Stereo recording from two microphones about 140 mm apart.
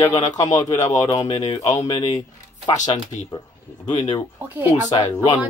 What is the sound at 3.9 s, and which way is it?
Speech, 50° left (ahead or behind).